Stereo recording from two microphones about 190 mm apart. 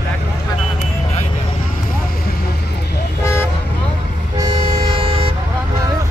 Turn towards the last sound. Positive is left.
turn(degrees=-30)  # may be behind; listen again after turning